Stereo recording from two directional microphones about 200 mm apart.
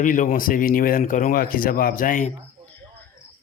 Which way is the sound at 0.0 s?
40° left (ahead or behind).